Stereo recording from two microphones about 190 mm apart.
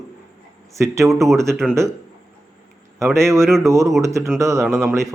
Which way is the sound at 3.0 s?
15° right (ahead or behind).